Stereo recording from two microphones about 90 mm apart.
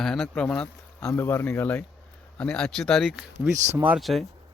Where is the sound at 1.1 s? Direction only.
30° left (ahead or behind); by 3.0 s 5° left (ahead or behind).